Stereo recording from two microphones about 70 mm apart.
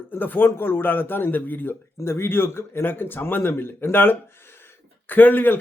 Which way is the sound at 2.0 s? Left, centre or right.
Left.